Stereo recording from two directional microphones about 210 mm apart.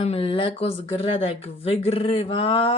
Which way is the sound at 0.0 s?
25° left (ahead or behind).